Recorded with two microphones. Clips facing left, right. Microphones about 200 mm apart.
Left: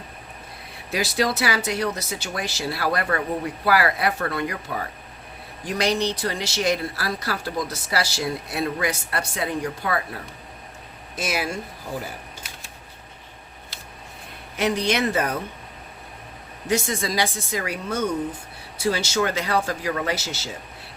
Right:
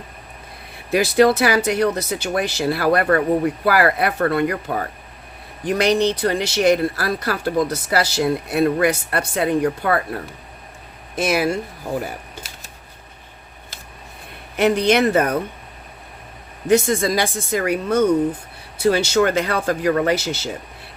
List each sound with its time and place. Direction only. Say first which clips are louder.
0.9 s speech: right 9 dB; 55° right (ahead or behind)
5.6 s speech: right 6 dB; 60° right (ahead or behind)
11.2 s speech: right 7 dB; 55° right (ahead or behind)
14.5 s speech: right 7 dB; 55° right (ahead or behind)
16.6 s speech: right 8 dB; 55° right (ahead or behind)